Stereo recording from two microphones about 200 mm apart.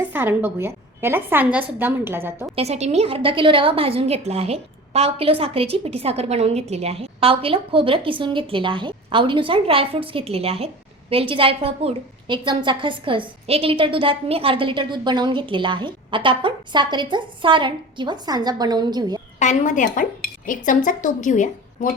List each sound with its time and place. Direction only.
0.0 s a woman's voice: 10° right (ahead or behind)
2.6 s a woman's voice: 35° right (ahead or behind)
19.4 s speech: 40° left (ahead or behind)